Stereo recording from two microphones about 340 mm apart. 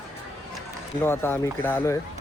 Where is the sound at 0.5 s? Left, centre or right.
Centre.